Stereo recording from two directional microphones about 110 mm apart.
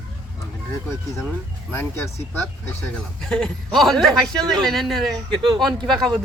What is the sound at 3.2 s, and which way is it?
A man's voice, 5° left (ahead or behind).